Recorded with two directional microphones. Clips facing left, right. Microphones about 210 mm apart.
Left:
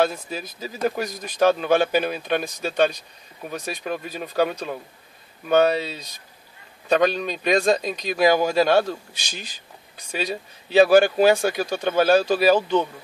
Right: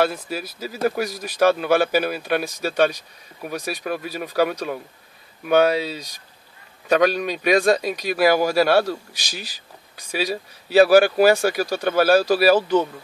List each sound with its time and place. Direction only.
0.0 s speech: 10° right (ahead or behind)